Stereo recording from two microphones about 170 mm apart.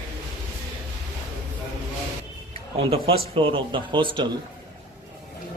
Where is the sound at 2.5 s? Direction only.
35° right (ahead or behind).